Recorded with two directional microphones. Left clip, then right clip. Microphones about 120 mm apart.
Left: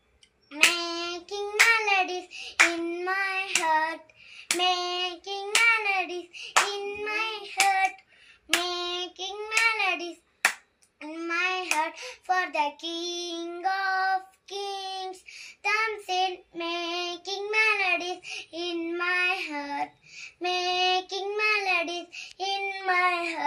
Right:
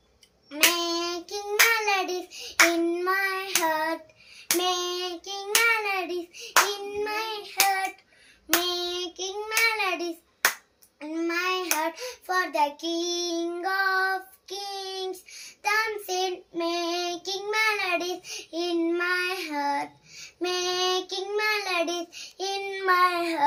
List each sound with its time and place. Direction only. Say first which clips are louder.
0.7 s child singing: right 3 dB; 45° right (ahead or behind)